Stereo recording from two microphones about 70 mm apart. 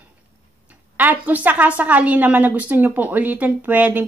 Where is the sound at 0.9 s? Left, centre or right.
Right.